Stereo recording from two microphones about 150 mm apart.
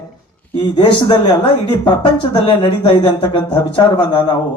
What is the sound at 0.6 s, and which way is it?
Speech, 30° left (ahead or behind).